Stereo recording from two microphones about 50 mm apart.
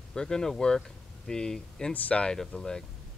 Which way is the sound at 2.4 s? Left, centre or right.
Centre.